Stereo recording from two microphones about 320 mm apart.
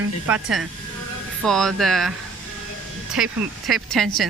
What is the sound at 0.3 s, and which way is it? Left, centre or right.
Speech, centre.